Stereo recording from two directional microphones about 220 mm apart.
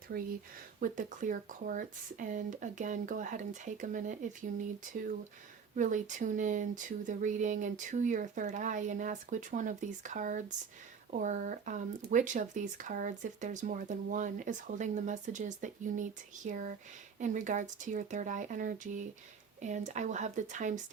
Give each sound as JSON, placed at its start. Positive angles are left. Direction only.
{"t": 0.1, "sound": "speech", "side_deg": -45}
{"t": 5.7, "sound": "speech", "side_deg": -35}